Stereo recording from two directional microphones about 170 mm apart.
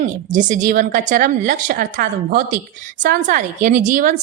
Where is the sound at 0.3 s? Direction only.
45° right (ahead or behind).